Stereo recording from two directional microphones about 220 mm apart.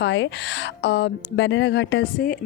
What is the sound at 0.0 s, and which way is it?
Speech, 55° left (ahead or behind).